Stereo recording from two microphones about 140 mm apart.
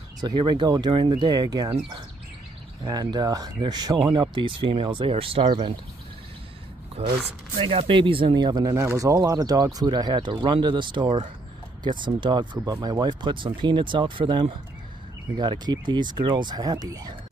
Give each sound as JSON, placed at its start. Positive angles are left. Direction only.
{"t": 0.2, "sound": "speech", "side_deg": -30}
{"t": 7.0, "sound": "speech", "side_deg": -45}